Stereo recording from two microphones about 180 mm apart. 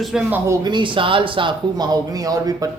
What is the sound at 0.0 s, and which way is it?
Speech, 5° right (ahead or behind).